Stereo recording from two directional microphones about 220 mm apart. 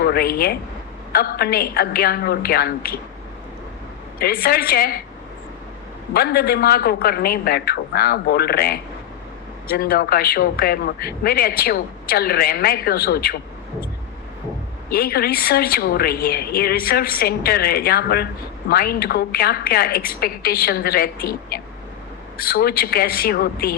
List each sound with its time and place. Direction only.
0.0 s speech: 45° left (ahead or behind)
4.2 s speech: 45° left (ahead or behind)
6.1 s speech: 45° left (ahead or behind)
14.8 s speech: 45° left (ahead or behind)